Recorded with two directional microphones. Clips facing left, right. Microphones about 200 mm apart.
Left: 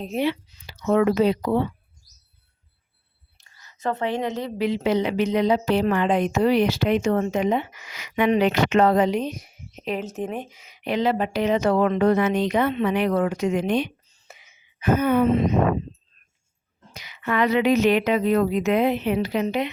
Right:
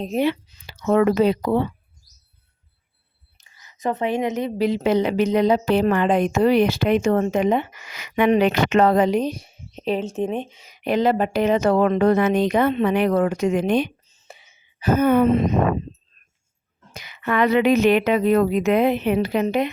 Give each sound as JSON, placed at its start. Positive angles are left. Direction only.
{"t": 0.0, "sound": "speech", "side_deg": -45}
{"t": 3.3, "sound": "whispering", "side_deg": -15}
{"t": 4.5, "sound": "speech", "side_deg": -40}
{"t": 10.7, "sound": "speech", "side_deg": -45}
{"t": 14.1, "sound": "a sound", "side_deg": -25}
{"t": 16.9, "sound": "a woman's voice", "side_deg": -50}